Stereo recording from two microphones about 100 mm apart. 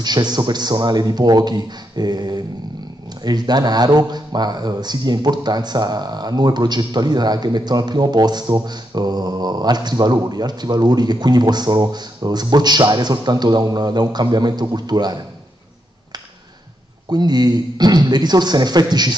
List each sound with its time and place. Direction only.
0.0 s speech: 45° right (ahead or behind)
17.1 s speech: 45° right (ahead or behind)